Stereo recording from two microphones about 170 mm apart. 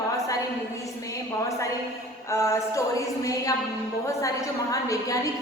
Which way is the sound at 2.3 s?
15° left (ahead or behind).